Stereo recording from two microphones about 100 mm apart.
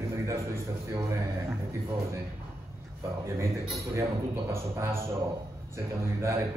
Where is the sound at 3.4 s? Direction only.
30° right (ahead or behind).